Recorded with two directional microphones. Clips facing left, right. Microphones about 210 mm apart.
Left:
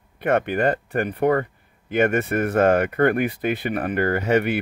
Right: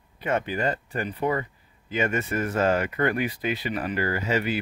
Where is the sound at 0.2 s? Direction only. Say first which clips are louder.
Left 6 dB; 60° left (ahead or behind).